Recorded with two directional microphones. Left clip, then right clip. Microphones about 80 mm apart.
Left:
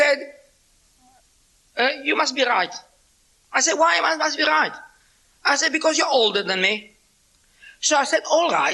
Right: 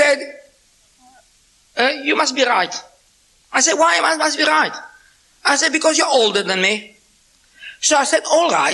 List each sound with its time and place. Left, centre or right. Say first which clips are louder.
0.0 s a sound: right 4 dB; left
1.7 s a man's voice: right 4 dB; left
2.2 s a woman's voice: right 4 dB; left
5.4 s a woman's voice: right 4 dB; left